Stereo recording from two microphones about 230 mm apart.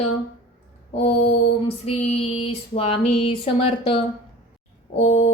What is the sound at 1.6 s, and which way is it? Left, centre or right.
Female singing, left.